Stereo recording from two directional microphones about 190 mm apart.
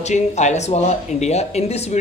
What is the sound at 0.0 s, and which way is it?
Speech, 40° left (ahead or behind).